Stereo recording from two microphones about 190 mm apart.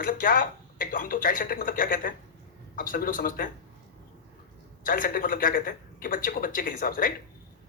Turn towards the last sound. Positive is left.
turn(degrees=45)  # may be behind; listen again after turning